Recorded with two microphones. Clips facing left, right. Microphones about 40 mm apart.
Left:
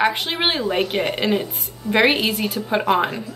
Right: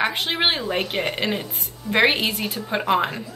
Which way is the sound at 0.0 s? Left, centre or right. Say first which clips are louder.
Left 2 dB; centre.